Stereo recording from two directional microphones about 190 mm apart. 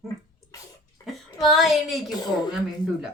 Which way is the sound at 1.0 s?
Centre (ahead or behind).